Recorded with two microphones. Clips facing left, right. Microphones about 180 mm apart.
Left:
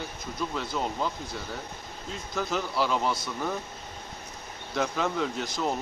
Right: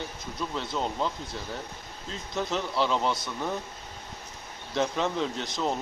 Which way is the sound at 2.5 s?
5° left (ahead or behind).